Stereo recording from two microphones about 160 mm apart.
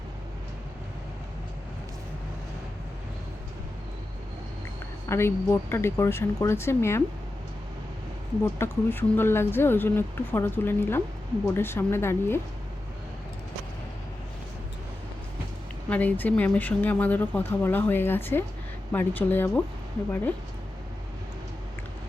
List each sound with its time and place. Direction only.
5.0 s speech: 15° left (ahead or behind)
8.5 s speech: 15° left (ahead or behind)
15.9 s speech: 10° left (ahead or behind)